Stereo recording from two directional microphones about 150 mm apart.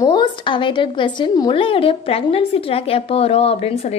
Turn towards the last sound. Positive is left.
turn(degrees=40)  # may be behind; listen again after turning